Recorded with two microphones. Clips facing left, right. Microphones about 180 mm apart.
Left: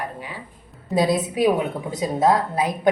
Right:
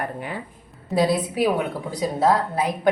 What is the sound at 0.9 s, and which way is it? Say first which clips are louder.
A woman's voice: even; 20° left (ahead or behind).